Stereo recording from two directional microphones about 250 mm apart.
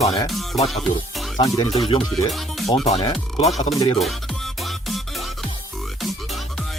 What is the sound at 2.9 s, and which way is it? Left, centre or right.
Speech, left.